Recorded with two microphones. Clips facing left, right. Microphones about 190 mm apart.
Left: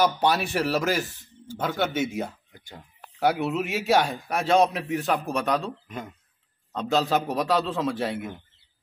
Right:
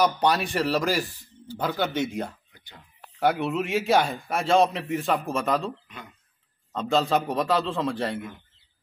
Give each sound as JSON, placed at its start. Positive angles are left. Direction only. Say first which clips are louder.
{"t": 0.0, "sound": "a man's voice", "louder": "even", "side_deg": 5}
{"t": 2.5, "sound": "a sound", "louder": "left 6 dB", "side_deg": 45}
{"t": 3.2, "sound": "a man's voice", "louder": "even", "side_deg": 5}
{"t": 5.9, "sound": "speech", "louder": "left 8 dB", "side_deg": 45}
{"t": 6.7, "sound": "a man's voice", "louder": "even", "side_deg": 0}